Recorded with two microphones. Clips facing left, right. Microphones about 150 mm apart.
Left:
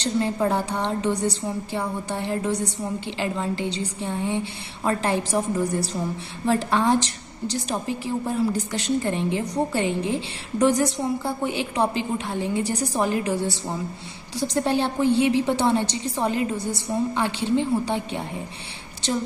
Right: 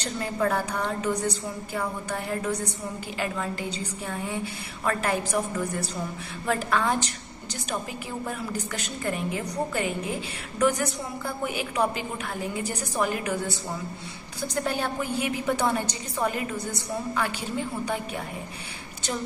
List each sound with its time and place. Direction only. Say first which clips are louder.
0.0 s a woman's voice: left 4 dB; 25° left (ahead or behind)